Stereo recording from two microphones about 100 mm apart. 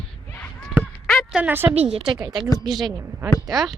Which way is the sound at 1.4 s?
20° right (ahead or behind).